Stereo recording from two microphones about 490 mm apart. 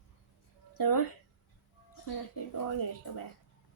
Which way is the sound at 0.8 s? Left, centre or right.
Left.